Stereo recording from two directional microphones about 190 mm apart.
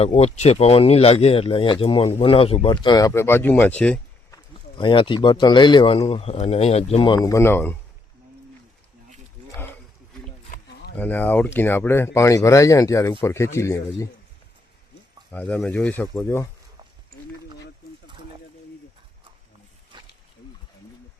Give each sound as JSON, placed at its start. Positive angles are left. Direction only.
{"t": 0.0, "sound": "speech", "side_deg": 35}
{"t": 4.8, "sound": "speech", "side_deg": 25}
{"t": 10.9, "sound": "speech", "side_deg": 10}
{"t": 15.3, "sound": "speech", "side_deg": 10}